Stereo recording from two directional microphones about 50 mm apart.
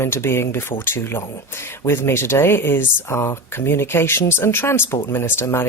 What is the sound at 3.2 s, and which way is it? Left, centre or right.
Speech, left.